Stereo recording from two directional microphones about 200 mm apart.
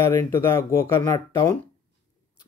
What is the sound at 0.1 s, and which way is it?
Speech, 15° left (ahead or behind).